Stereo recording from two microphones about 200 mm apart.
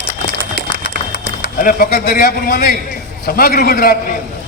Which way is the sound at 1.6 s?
45° left (ahead or behind).